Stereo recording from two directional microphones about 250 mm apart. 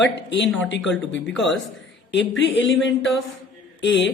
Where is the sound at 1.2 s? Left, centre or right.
Centre.